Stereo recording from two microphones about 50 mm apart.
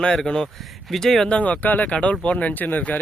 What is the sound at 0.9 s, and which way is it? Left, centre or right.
Speech, centre.